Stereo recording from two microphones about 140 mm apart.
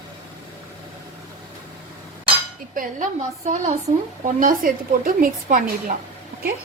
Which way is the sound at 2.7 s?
65° right (ahead or behind).